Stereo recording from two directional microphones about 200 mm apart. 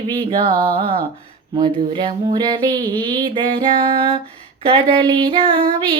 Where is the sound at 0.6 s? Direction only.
25° right (ahead or behind).